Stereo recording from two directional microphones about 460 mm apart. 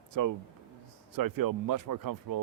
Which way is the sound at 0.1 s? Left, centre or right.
Right.